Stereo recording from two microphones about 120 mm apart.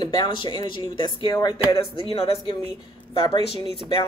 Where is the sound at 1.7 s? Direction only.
50° left (ahead or behind).